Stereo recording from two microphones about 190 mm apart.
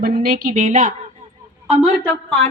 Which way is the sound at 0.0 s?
50° right (ahead or behind).